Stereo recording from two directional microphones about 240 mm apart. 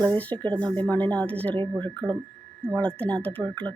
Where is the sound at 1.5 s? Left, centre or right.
Centre.